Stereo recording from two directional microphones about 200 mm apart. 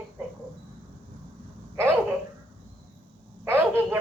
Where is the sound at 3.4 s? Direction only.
10° right (ahead or behind).